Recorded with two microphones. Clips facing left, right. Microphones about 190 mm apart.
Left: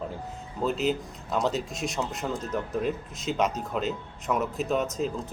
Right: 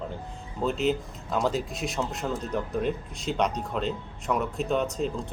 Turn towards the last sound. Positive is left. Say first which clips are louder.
# even
turn(degrees=0)  # may be behind; listen again after turning